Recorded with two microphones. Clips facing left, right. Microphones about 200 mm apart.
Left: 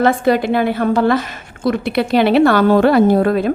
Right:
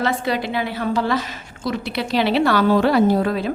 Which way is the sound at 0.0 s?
50° left (ahead or behind).